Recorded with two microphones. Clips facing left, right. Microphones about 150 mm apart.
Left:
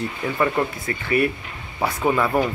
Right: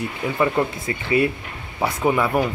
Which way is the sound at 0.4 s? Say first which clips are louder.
Right 1 dB; 20° right (ahead or behind).